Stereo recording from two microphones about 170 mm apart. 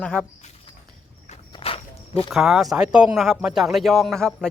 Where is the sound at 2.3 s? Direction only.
5° right (ahead or behind).